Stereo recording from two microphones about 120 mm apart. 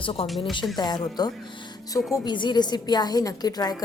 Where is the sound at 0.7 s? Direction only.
35° left (ahead or behind).